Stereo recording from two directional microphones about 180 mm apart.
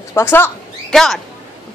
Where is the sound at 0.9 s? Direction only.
Centre (ahead or behind).